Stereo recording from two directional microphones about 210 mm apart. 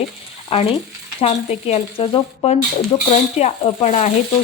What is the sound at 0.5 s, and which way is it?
Speech, 30° left (ahead or behind).